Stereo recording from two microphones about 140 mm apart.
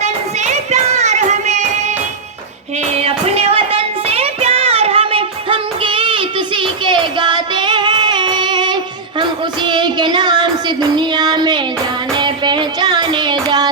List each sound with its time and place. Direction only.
0.0 s child singing: 55° right (ahead or behind)
2.9 s child singing: 45° right (ahead or behind); by 11.6 s 30° right (ahead or behind)
12.1 s music: 35° right (ahead or behind)